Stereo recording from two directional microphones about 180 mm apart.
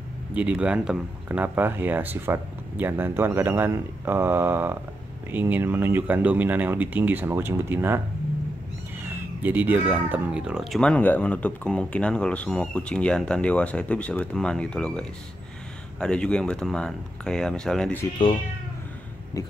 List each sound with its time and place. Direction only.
0.3 s speech: 5° right (ahead or behind)
9.0 s speech: 10° right (ahead or behind); by 18.0 s 5° left (ahead or behind)
19.4 s a sound: 20° left (ahead or behind)